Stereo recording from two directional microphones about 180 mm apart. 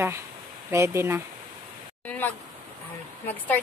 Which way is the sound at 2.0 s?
10° left (ahead or behind).